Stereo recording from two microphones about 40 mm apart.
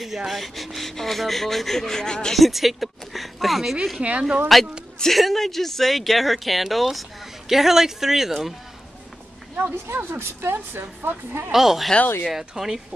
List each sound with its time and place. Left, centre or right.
0.0 s speech: centre
2.3 s speech: centre
4.0 s speech: right
4.5 s speech: centre
9.8 s a woman's voice: right
11.5 s speech: centre